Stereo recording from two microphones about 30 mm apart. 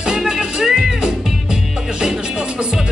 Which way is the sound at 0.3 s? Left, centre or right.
Right.